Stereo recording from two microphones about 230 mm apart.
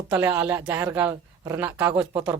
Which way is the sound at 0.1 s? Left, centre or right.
Centre.